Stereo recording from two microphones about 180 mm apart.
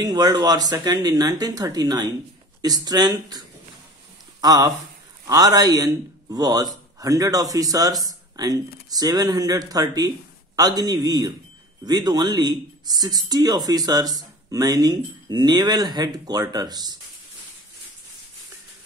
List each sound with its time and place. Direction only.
0.0 s a man's voice: 20° right (ahead or behind)